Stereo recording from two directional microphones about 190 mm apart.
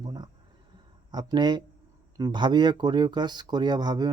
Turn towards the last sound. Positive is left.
turn(degrees=-20)  # may be behind; listen again after turning